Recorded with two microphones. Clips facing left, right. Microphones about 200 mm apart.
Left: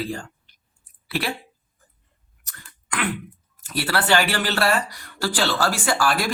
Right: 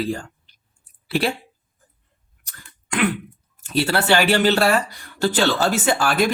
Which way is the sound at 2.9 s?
25° right (ahead or behind).